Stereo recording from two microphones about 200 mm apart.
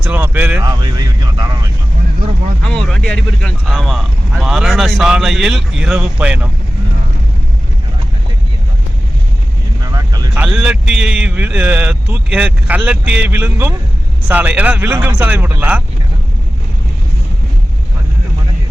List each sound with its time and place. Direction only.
0.1 s speech: 10° right (ahead or behind)
0.6 s speech: 20° right (ahead or behind)
2.6 s speech: 5° left (ahead or behind)
9.8 s vehicle: 20° right (ahead or behind)
10.3 s speech: 5° right (ahead or behind)